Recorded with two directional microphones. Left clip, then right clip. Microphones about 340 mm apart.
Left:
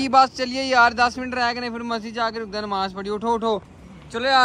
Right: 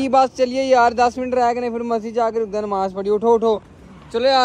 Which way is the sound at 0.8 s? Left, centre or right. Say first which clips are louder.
Right 2 dB; centre.